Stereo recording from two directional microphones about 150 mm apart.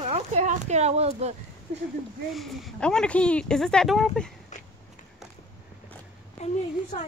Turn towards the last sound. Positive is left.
turn(degrees=50)  # may be behind; listen again after turning